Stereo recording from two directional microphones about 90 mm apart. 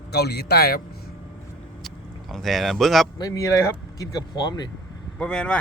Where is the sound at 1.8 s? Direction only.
Centre (ahead or behind).